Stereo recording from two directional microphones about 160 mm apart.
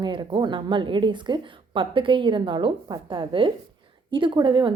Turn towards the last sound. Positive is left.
turn(degrees=-30)  # may be behind; listen again after turning